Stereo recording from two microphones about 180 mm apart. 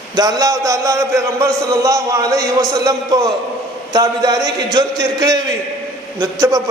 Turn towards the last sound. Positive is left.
turn(degrees=-20)  # may be behind; listen again after turning